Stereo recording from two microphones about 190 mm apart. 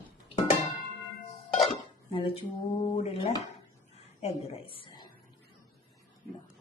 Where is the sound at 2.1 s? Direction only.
30° left (ahead or behind).